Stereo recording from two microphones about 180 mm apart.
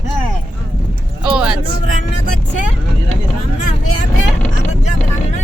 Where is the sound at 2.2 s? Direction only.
45° left (ahead or behind).